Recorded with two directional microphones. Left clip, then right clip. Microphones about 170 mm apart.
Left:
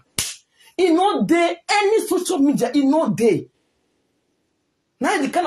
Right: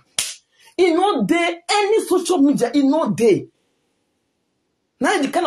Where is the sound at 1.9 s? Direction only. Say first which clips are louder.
Right 1 dB; centre (ahead or behind); by 3.3 s 20° right (ahead or behind).